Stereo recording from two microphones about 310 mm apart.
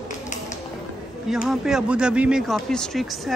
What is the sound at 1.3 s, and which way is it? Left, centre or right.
Speech, centre.